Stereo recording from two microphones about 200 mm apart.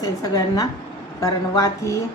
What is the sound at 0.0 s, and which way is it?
A woman's voice, 20° left (ahead or behind).